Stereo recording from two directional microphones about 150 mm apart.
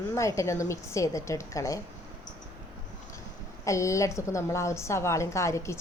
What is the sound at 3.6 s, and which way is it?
A woman's voice, 20° left (ahead or behind).